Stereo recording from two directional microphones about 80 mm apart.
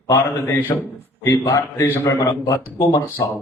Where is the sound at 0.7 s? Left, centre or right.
Left.